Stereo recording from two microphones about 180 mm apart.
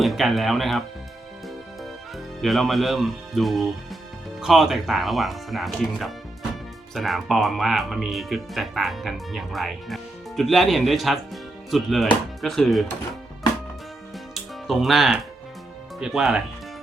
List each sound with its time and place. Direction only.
0.0 s speech: centre (ahead or behind)
14.3 s music: centre (ahead or behind)
16.0 s speech: centre (ahead or behind)